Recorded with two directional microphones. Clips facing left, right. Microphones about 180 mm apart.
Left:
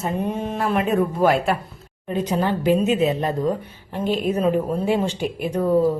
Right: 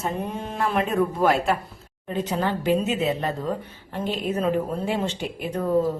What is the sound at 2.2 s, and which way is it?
A woman's voice, 15° left (ahead or behind).